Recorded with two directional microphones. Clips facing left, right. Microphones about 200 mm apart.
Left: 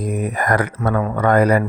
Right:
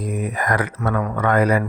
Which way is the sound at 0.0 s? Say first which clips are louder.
Left 3 dB; 40° left (ahead or behind).